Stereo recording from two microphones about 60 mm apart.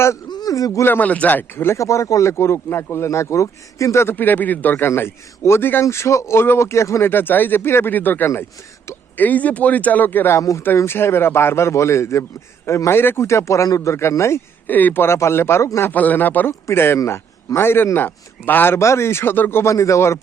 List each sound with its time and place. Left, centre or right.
0.4 s speech: left
0.9 s speech: left
1.8 s speech: left
4.0 s speech: left
4.9 s speech: left
5.8 s speech: left
7.1 s speech: left
13.9 s speech: left
14.7 s speech: left
15.0 s speech: left
15.9 s a man's voice: left
18.8 s speech: left
19.6 s speech: left